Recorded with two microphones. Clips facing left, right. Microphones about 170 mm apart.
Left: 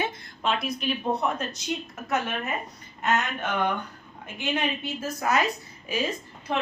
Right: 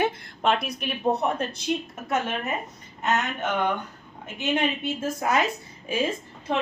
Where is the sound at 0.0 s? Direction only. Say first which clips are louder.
Right 5 dB; 55° right (ahead or behind).